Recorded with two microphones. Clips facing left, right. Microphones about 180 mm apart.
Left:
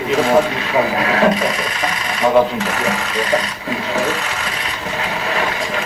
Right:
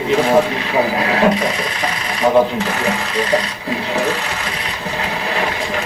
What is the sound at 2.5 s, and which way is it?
Sewing machine, 30° right (ahead or behind).